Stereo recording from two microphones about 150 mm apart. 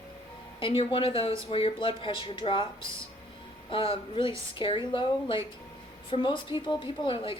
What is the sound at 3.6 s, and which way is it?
Speech, 35° left (ahead or behind).